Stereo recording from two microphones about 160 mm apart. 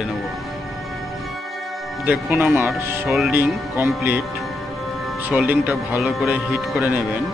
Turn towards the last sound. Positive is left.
turn(degrees=-10)  # may be behind; listen again after turning